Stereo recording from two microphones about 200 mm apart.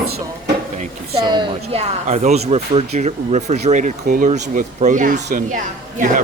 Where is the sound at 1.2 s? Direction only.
20° right (ahead or behind); by 5.5 s 45° right (ahead or behind).